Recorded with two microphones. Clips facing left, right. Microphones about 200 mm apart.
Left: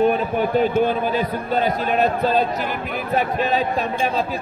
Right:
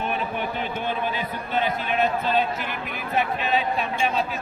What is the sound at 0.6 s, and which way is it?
A man's voice, 40° left (ahead or behind).